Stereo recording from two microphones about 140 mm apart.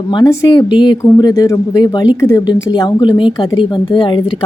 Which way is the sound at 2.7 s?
30° left (ahead or behind).